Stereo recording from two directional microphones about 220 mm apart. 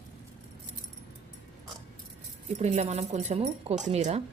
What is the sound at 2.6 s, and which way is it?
Speech, 30° right (ahead or behind).